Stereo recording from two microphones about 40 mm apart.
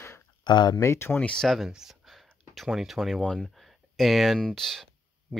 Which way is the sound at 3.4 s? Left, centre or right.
Centre.